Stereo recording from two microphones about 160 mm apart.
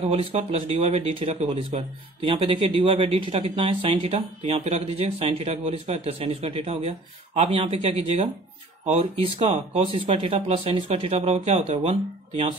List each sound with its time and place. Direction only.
0.0 s speech: 40° right (ahead or behind)